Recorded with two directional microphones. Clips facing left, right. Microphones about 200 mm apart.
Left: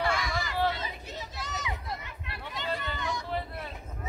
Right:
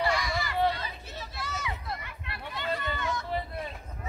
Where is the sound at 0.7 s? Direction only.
20° left (ahead or behind).